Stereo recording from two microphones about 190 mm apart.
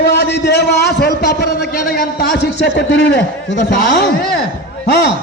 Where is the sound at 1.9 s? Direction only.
55° left (ahead or behind).